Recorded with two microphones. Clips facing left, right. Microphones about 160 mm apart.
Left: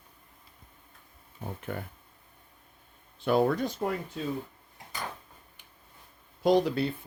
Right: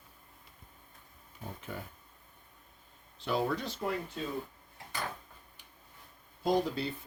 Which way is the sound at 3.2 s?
55° left (ahead or behind).